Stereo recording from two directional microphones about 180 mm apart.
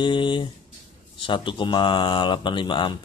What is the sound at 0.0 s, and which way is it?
Speech, 25° left (ahead or behind).